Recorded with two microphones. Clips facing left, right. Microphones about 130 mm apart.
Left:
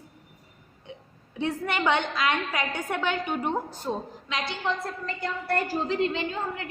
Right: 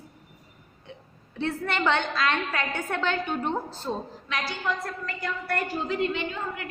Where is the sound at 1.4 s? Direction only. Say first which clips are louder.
Even; 15° left (ahead or behind).